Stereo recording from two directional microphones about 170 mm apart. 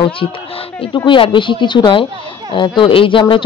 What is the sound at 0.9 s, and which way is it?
A woman's voice, 30° left (ahead or behind).